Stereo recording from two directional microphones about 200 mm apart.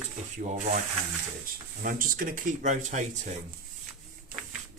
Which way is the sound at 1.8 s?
45° right (ahead or behind).